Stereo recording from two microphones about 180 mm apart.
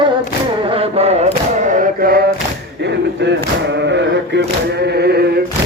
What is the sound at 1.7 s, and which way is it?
Music, 50° right (ahead or behind).